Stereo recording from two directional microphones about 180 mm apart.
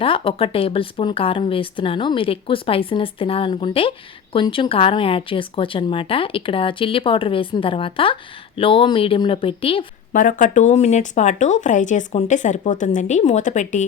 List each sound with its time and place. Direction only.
0.0 s speech: 30° left (ahead or behind)
10.1 s speech: 50° left (ahead or behind)